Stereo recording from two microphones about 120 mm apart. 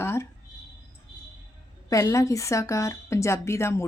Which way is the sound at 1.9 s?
30° left (ahead or behind).